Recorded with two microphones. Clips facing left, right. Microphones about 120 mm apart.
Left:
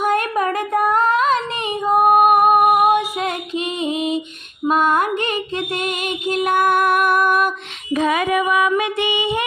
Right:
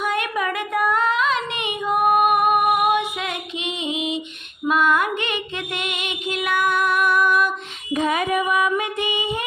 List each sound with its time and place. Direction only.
0.0 s child singing: 45° left (ahead or behind)
4.7 s music: 40° left (ahead or behind)
7.9 s a sound: 90° left